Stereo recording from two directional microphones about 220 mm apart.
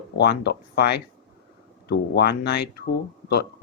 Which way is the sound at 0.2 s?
50° left (ahead or behind).